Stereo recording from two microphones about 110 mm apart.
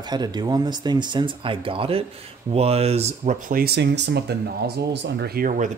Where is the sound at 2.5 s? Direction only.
65° right (ahead or behind).